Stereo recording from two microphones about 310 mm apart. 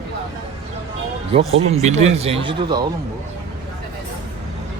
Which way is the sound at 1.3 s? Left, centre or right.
Centre.